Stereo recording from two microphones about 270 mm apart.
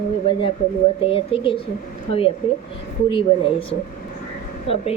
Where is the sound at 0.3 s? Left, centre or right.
Centre.